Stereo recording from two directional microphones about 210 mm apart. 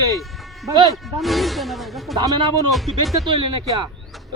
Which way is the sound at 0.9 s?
Centre (ahead or behind).